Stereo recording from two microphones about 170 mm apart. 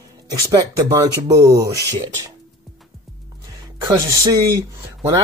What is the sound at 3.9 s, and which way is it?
A man's voice, 20° right (ahead or behind).